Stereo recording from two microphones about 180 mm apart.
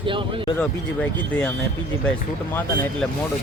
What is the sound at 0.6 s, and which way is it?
Speech, 5° left (ahead or behind).